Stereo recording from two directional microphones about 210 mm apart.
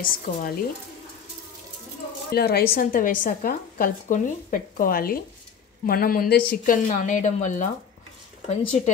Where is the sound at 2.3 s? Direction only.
45° left (ahead or behind).